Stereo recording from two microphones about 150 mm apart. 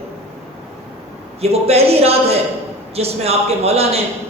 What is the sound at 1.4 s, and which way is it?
A woman's voice, 45° right (ahead or behind).